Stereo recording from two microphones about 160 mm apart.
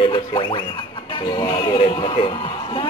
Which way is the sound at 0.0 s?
30° left (ahead or behind).